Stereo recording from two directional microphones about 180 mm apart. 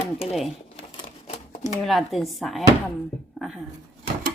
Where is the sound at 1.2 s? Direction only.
35° left (ahead or behind).